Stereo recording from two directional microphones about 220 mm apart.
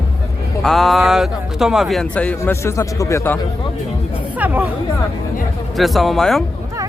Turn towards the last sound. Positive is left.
turn(degrees=0)  # may be behind; listen again after turning